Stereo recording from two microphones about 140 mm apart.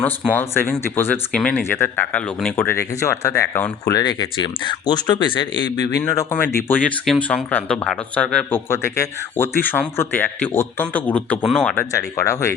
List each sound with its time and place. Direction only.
0.0 s speech: 15° left (ahead or behind)
6.0 s speech: 15° left (ahead or behind)
12.1 s speech: 20° left (ahead or behind)